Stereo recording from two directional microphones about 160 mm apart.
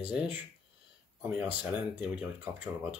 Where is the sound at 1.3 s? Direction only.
10° right (ahead or behind).